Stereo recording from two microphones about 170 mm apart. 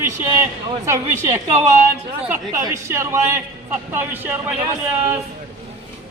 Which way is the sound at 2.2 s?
10° right (ahead or behind).